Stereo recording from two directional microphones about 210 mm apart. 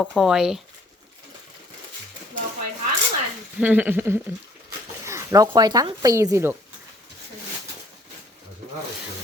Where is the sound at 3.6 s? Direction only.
10° right (ahead or behind).